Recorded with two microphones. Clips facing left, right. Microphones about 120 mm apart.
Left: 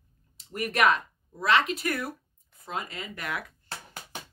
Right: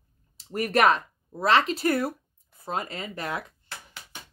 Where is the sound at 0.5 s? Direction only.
35° right (ahead or behind).